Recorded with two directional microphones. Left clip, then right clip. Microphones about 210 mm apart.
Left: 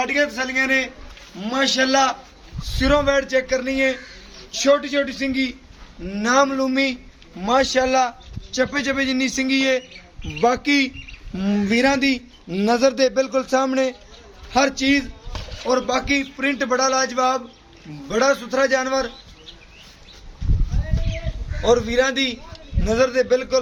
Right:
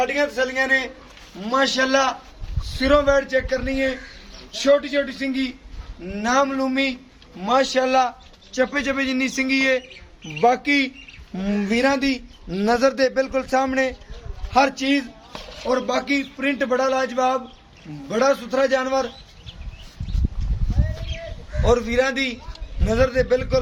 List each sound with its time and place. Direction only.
0.0 s a man's voice: 35° left (ahead or behind); by 9.8 s centre (ahead or behind)
10.4 s a man's voice: 15° left (ahead or behind)
15.3 s chopping: centre (ahead or behind)
15.7 s a man's voice: 10° left (ahead or behind)
21.6 s a man's voice: 5° left (ahead or behind)